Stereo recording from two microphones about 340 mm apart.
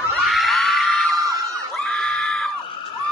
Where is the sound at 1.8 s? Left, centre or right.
Centre.